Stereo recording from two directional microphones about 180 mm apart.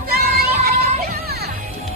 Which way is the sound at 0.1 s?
60° right (ahead or behind).